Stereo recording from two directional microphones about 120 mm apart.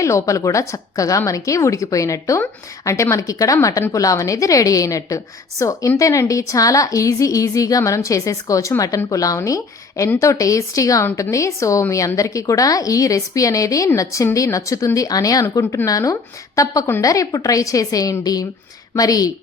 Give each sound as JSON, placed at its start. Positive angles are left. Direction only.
{"t": 0.0, "sound": "a woman's voice", "side_deg": 25}